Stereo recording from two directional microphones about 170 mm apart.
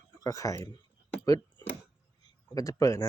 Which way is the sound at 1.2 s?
20° left (ahead or behind).